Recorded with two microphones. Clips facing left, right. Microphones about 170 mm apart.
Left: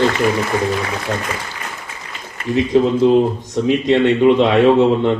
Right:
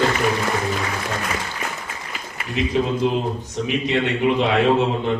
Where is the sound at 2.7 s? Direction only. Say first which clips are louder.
Left 9 dB; 75° left (ahead or behind).